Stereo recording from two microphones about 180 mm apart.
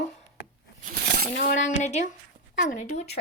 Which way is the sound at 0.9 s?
60° right (ahead or behind).